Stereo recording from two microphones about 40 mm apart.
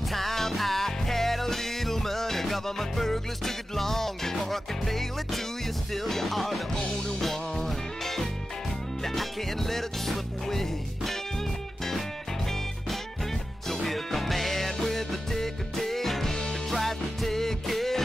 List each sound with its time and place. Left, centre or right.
0.1 s music: centre
13.8 s music: centre